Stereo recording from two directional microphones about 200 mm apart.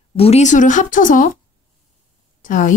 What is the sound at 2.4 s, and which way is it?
Speech, 40° left (ahead or behind).